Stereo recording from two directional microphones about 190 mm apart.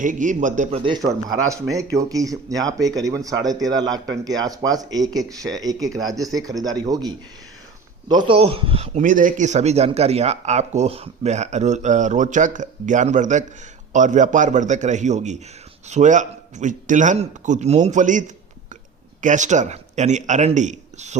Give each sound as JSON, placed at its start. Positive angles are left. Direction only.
{"t": 0.0, "sound": "a man's voice", "side_deg": -40}
{"t": 0.8, "sound": "a man's voice", "side_deg": -25}